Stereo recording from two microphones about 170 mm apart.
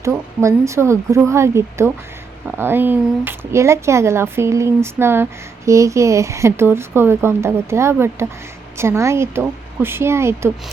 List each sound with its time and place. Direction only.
0.0 s speech: 15° right (ahead or behind)